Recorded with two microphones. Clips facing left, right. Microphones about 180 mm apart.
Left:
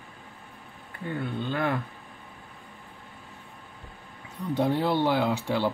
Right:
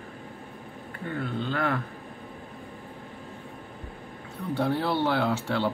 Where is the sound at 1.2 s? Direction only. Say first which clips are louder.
Even; 15° left (ahead or behind).